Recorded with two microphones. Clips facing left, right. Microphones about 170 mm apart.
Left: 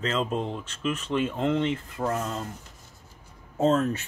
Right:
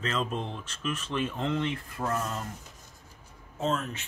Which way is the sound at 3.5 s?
40° left (ahead or behind).